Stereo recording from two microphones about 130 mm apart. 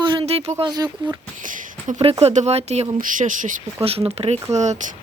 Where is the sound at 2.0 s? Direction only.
50° right (ahead or behind).